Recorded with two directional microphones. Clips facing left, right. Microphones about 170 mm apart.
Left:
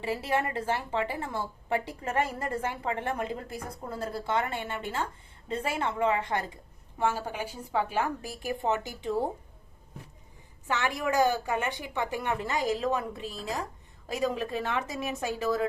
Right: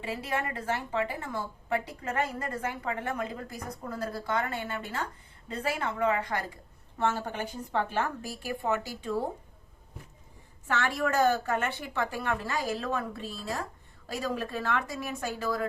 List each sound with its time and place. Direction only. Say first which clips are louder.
0.0 s a woman's voice: left 4 dB; 30° left (ahead or behind)
7.0 s a woman's voice: even; 10° left (ahead or behind)
10.7 s a woman's voice: even; 20° left (ahead or behind)